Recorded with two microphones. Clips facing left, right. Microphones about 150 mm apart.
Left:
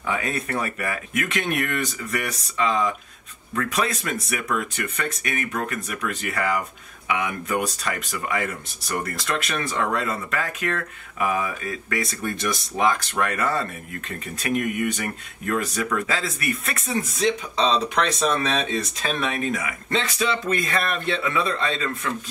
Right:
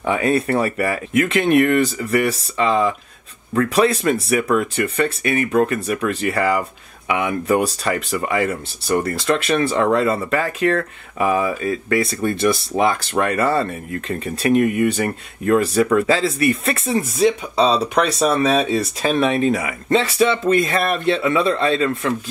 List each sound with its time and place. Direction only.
0.0 s speech: 30° right (ahead or behind)
17.6 s speech: 5° right (ahead or behind)
19.1 s speech: 30° right (ahead or behind)